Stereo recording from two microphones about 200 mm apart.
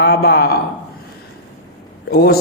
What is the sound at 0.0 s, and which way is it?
Speech, 50° left (ahead or behind).